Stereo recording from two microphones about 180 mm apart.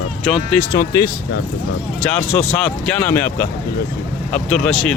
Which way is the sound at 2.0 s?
5° left (ahead or behind).